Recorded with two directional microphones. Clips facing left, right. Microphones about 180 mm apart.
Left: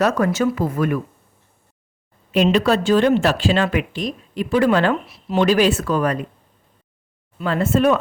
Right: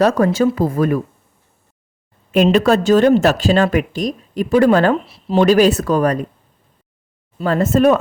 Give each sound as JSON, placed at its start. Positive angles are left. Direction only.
{"t": 0.0, "sound": "speech", "side_deg": -30}
{"t": 2.3, "sound": "speech", "side_deg": -45}
{"t": 5.0, "sound": "speech", "side_deg": -30}
{"t": 5.4, "sound": "speech", "side_deg": -40}
{"t": 7.3, "sound": "speech", "side_deg": -40}